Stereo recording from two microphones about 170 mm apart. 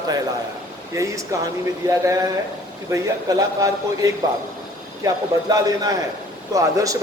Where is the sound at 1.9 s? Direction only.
20° right (ahead or behind).